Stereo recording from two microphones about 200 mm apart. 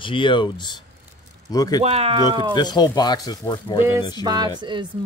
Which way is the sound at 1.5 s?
20° left (ahead or behind).